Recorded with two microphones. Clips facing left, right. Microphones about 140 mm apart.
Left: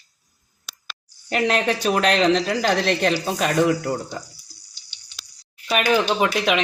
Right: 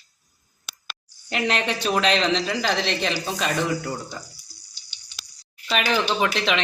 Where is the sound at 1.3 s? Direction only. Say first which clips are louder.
Left 4 dB; 45° left (ahead or behind).